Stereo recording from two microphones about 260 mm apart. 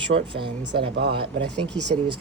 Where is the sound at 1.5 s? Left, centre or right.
Centre.